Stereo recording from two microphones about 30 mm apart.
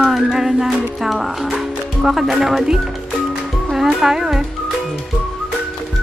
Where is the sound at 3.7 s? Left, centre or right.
Centre.